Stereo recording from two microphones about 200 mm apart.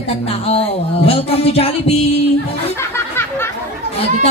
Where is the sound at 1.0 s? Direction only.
30° left (ahead or behind).